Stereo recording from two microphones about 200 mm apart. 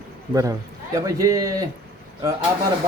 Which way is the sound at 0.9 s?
15° right (ahead or behind).